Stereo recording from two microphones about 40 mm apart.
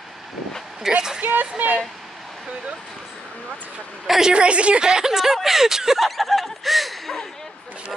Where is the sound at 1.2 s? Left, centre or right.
Right.